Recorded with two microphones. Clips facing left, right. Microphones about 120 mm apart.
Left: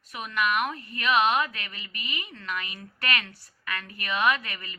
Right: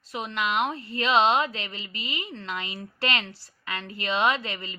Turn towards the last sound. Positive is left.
turn(degrees=-25)  # may be behind; listen again after turning